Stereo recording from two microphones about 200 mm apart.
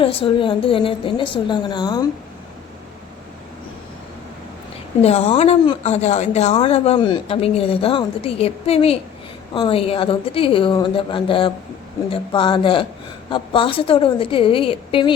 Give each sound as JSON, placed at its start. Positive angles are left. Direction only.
{"t": 0.0, "sound": "a woman's voice", "side_deg": 30}
{"t": 5.0, "sound": "a woman's voice", "side_deg": 30}